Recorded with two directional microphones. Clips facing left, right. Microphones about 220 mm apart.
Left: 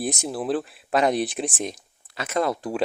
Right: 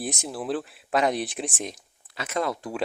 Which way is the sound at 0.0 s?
40° left (ahead or behind).